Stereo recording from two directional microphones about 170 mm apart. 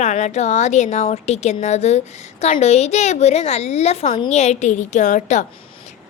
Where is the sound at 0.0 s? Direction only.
45° left (ahead or behind).